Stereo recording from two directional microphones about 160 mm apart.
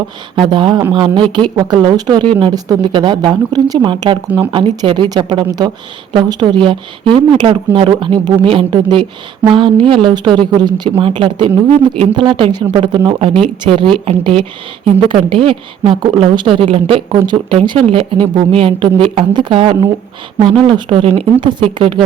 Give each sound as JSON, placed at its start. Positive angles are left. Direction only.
{"t": 0.3, "sound": "a woman's voice", "side_deg": -30}